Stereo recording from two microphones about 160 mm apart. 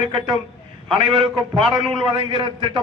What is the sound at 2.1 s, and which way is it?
Speech, 30° right (ahead or behind).